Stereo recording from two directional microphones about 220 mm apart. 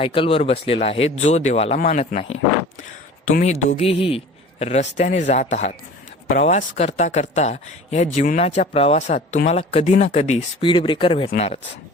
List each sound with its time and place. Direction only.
0.0 s speech: 25° left (ahead or behind)